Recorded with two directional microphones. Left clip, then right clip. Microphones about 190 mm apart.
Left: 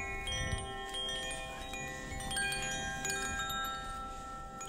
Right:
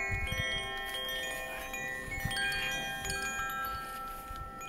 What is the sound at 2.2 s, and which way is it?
Wind chime, 45° left (ahead or behind).